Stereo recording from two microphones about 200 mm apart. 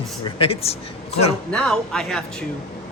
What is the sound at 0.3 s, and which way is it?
Speech, 30° left (ahead or behind).